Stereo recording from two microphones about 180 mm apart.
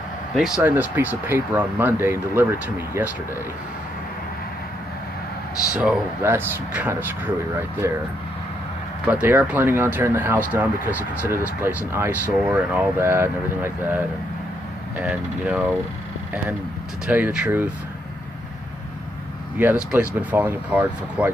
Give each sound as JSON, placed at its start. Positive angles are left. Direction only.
{"t": 0.6, "sound": "speech", "side_deg": -10}
{"t": 5.8, "sound": "speech", "side_deg": -10}
{"t": 9.0, "sound": "speech", "side_deg": -10}
{"t": 17.0, "sound": "speech", "side_deg": -5}
{"t": 19.6, "sound": "speech", "side_deg": -10}